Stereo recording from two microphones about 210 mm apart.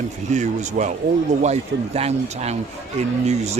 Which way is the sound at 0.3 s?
35° right (ahead or behind).